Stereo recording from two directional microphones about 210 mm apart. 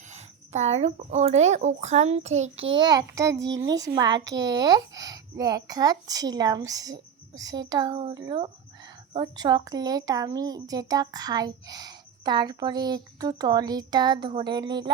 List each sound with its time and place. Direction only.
0.1 s speech: 35° right (ahead or behind)
2.6 s a child's voice: 20° right (ahead or behind)